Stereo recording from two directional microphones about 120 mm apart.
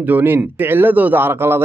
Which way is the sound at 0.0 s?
15° right (ahead or behind).